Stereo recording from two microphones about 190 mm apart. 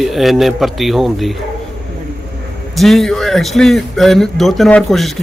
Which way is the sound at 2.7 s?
Centre (ahead or behind).